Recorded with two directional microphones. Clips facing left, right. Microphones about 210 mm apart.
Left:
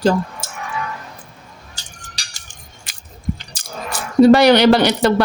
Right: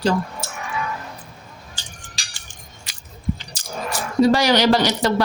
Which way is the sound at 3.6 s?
55° left (ahead or behind).